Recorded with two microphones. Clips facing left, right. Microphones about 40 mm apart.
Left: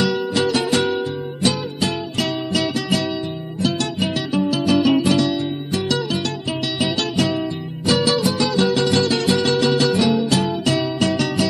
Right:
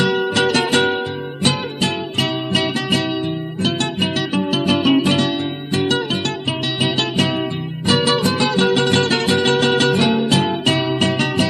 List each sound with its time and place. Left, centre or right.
0.0 s music: right
0.3 s music: right